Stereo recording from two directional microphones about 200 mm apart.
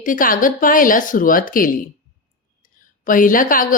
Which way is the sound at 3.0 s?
40° left (ahead or behind).